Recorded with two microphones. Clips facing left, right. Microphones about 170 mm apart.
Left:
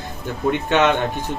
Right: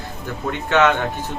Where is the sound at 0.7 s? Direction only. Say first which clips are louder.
Right 2 dB; 20° left (ahead or behind).